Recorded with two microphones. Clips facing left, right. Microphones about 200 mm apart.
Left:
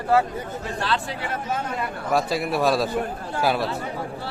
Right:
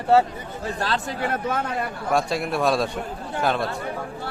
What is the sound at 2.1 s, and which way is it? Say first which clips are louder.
Speech: even; centre (ahead or behind).